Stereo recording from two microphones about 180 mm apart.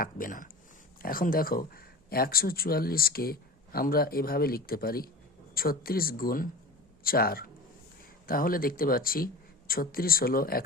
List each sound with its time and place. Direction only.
0.0 s speech: 50° left (ahead or behind)